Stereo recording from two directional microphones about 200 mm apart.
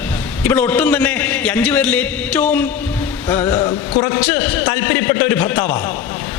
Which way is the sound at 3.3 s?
20° left (ahead or behind).